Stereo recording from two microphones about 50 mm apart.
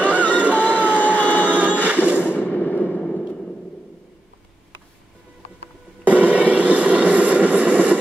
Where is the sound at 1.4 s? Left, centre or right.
Right.